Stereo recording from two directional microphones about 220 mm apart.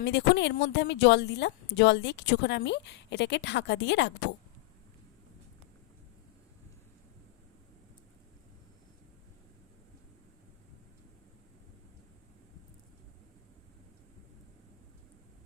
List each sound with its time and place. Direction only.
0.0 s a woman's voice: 55° left (ahead or behind)